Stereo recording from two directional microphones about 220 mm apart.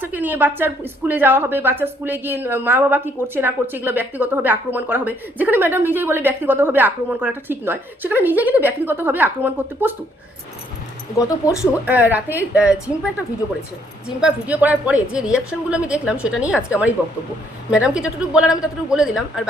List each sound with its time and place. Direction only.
0.0 s speech: 10° right (ahead or behind)
11.2 s speech: 15° left (ahead or behind)
11.6 s speech: 5° right (ahead or behind)
14.2 s a woman's voice: 5° right (ahead or behind)